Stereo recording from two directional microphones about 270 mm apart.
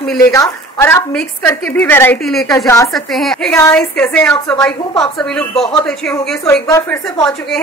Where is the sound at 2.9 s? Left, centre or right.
Centre.